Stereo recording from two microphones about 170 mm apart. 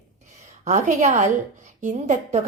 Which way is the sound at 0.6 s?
45° right (ahead or behind).